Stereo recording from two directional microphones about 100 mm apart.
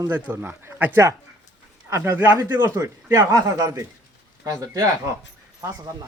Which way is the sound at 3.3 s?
35° right (ahead or behind).